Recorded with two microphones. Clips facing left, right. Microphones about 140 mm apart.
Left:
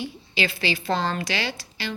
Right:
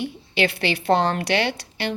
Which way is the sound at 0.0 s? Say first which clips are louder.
Right 5 dB; 65° right (ahead or behind).